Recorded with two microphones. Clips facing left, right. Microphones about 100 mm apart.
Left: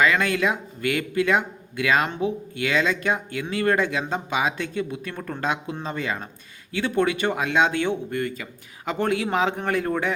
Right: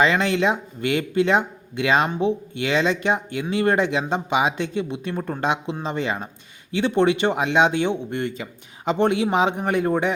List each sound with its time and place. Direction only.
0.0 s speech: 25° right (ahead or behind)